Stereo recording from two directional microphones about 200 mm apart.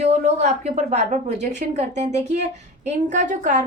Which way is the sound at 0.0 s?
35° right (ahead or behind).